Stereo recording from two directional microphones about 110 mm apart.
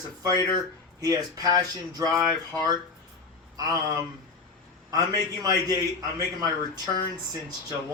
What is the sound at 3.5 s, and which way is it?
Speech, 35° right (ahead or behind).